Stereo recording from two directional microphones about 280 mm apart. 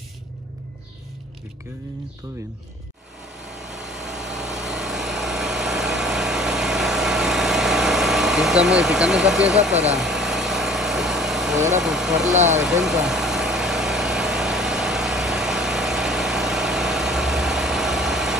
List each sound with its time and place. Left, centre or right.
3.4 s vehicle: centre
9.8 s engine: centre
11.8 s speech: centre
12.4 s speech: right
12.6 s vehicle: centre